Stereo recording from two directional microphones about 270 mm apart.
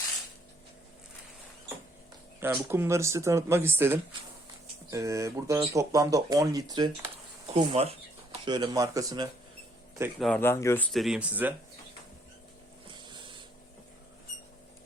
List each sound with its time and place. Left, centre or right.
2.4 s speech: centre
10.0 s speech: centre
13.0 s a sound: centre